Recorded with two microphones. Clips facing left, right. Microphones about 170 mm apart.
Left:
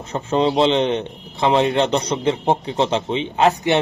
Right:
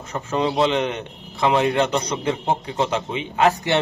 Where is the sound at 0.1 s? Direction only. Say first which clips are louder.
Left 4 dB; 30° left (ahead or behind).